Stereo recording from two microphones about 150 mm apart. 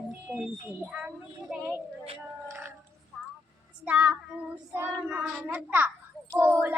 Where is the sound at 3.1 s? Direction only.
5° left (ahead or behind).